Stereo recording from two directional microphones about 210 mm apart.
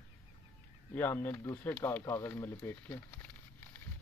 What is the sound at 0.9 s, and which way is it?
Speech, 10° left (ahead or behind).